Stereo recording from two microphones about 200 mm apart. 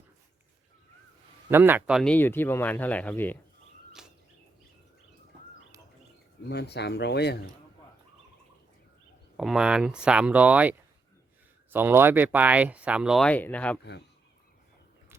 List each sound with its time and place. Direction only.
1.5 s speech: 10° right (ahead or behind); by 3.3 s 10° left (ahead or behind)
4.0 s a sound: 5° right (ahead or behind)
6.5 s speech: 55° left (ahead or behind)
9.4 s speech: 5° right (ahead or behind)